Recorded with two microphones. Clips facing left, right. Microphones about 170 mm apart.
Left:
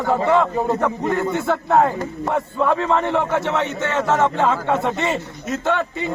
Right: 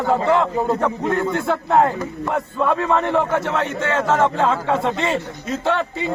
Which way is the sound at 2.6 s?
10° left (ahead or behind).